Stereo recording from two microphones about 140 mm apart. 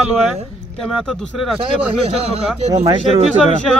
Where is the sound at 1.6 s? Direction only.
45° right (ahead or behind).